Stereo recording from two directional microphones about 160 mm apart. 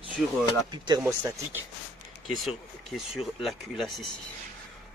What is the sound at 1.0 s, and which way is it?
Speech, 15° right (ahead or behind).